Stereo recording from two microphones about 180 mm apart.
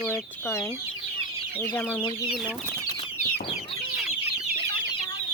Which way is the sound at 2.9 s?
30° left (ahead or behind).